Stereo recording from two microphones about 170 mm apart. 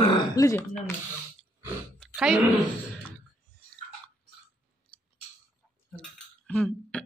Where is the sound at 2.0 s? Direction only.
Centre (ahead or behind).